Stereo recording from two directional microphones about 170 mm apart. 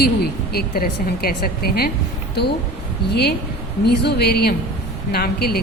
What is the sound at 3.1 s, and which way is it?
A woman's voice, 70° left (ahead or behind).